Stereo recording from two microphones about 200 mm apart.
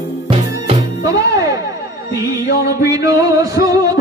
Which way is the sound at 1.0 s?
15° right (ahead or behind).